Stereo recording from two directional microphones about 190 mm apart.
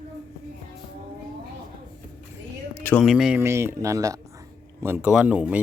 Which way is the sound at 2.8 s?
10° left (ahead or behind).